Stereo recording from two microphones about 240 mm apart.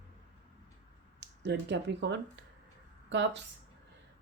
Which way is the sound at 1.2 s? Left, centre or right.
Right.